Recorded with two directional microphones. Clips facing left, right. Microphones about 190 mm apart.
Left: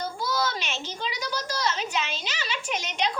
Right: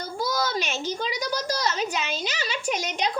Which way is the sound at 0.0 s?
40° right (ahead or behind).